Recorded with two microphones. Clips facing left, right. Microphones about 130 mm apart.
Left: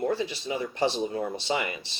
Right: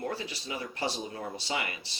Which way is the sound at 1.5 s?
25° left (ahead or behind).